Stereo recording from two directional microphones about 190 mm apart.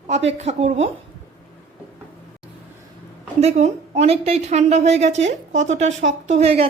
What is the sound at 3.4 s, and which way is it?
A woman's voice, 35° right (ahead or behind).